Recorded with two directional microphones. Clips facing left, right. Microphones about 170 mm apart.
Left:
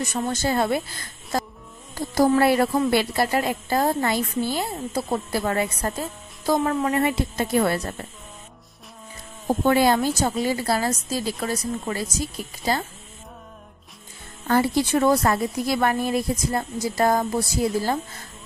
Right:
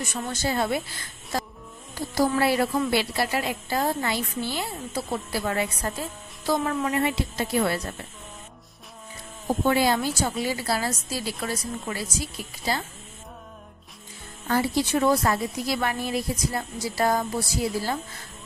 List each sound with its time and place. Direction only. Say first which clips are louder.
0.1 s a woman's voice: left 3 dB; 45° left (ahead or behind)
9.7 s a woman's voice: left 4 dB; 50° left (ahead or behind)
14.5 s a woman's voice: left 3 dB; 50° left (ahead or behind)